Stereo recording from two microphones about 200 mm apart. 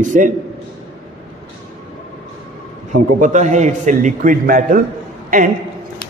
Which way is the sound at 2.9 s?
40° right (ahead or behind).